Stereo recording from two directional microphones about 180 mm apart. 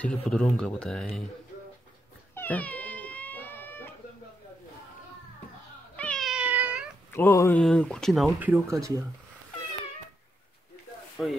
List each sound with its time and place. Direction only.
0.0 s speech: 5° left (ahead or behind)
2.3 s cat: 10° left (ahead or behind)
5.9 s cat: 5° left (ahead or behind)
7.1 s speech: 15° left (ahead or behind)
7.5 s speech: 5° left (ahead or behind); by 9.0 s 15° right (ahead or behind)
11.2 s speech: centre (ahead or behind)